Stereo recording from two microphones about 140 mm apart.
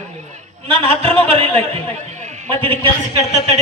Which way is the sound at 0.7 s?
40° right (ahead or behind).